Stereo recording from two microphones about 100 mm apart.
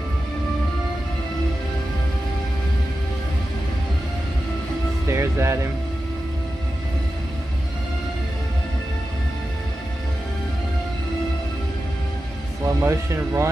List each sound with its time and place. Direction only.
5.0 s music: 25° right (ahead or behind)
12.6 s speech: 30° right (ahead or behind)